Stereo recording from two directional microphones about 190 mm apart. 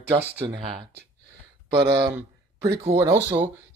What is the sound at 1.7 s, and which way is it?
Speech, 25° right (ahead or behind).